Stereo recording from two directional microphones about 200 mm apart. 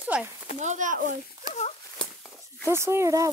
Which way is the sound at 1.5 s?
35° left (ahead or behind).